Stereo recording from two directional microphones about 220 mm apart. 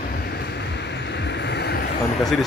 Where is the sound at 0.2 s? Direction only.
50° left (ahead or behind).